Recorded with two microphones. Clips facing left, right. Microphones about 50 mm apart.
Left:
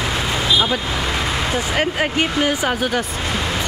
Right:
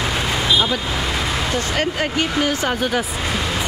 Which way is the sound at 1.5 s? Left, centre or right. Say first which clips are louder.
Left 1 dB; centre.